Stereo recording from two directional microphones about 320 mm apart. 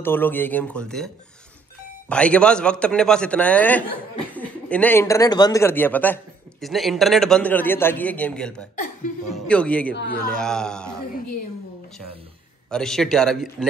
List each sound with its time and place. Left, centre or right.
0.0 s a man's voice: centre
9.9 s speech: left
10.3 s a man's voice: centre
12.6 s a man's voice: centre